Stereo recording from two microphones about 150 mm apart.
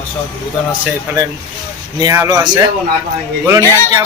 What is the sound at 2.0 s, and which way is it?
Speech, 25° right (ahead or behind).